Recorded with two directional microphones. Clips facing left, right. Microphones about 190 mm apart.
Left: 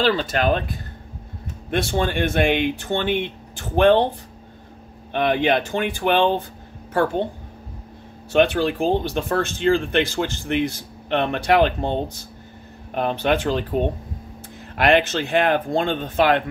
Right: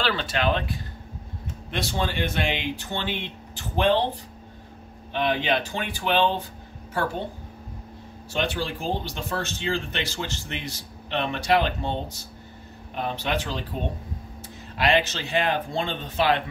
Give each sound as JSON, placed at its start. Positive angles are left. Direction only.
{"t": 0.0, "sound": "speech", "side_deg": 40}
{"t": 5.1, "sound": "speech", "side_deg": 55}
{"t": 8.3, "sound": "speech", "side_deg": 60}
{"t": 12.9, "sound": "speech", "side_deg": 55}
{"t": 14.8, "sound": "speech", "side_deg": 55}